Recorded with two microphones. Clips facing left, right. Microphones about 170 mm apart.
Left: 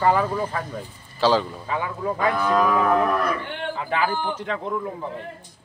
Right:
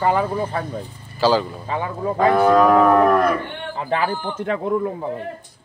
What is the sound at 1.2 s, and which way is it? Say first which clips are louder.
Speech: right 2 dB; centre (ahead or behind).